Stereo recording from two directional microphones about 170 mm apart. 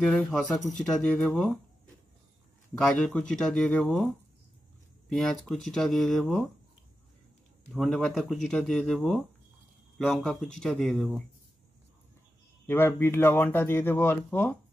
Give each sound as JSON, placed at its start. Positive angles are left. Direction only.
{"t": 0.0, "sound": "speech", "side_deg": 5}
{"t": 2.8, "sound": "speech", "side_deg": 5}
{"t": 5.1, "sound": "speech", "side_deg": 0}
{"t": 7.7, "sound": "speech", "side_deg": 0}
{"t": 12.6, "sound": "speech", "side_deg": 10}